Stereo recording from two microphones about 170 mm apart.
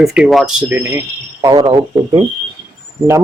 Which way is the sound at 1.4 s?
25° right (ahead or behind).